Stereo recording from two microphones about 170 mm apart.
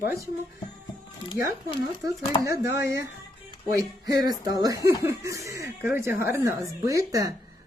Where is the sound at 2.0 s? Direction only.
15° right (ahead or behind).